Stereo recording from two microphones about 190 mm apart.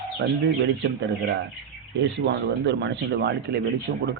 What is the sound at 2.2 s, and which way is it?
Speech, 65° right (ahead or behind).